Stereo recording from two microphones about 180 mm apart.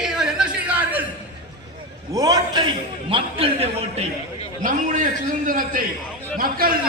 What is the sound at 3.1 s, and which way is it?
Speech, 30° right (ahead or behind).